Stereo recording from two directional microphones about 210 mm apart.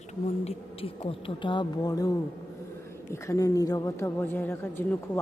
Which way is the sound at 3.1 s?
15° left (ahead or behind).